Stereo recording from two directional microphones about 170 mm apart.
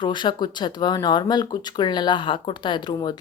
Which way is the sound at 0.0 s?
25° left (ahead or behind).